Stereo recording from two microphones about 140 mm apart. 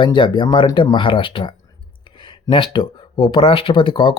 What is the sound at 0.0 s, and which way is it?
Speech, 35° left (ahead or behind).